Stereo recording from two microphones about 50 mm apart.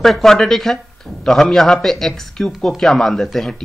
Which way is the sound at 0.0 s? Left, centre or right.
Centre.